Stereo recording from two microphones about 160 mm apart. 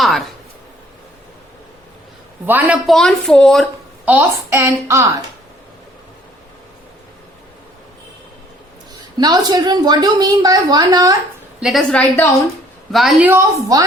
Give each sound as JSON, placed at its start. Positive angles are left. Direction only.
{"t": 0.0, "sound": "speech", "side_deg": 0}
{"t": 2.5, "sound": "a woman's voice", "side_deg": -10}
{"t": 2.8, "sound": "speech", "side_deg": 0}
{"t": 4.0, "sound": "a woman's voice", "side_deg": -10}
{"t": 9.1, "sound": "a woman's voice", "side_deg": -25}
{"t": 11.6, "sound": "speech", "side_deg": 0}
{"t": 13.2, "sound": "a woman's voice", "side_deg": -20}